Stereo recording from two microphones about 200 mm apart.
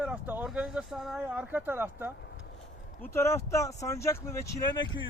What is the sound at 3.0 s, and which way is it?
Speech, 15° left (ahead or behind).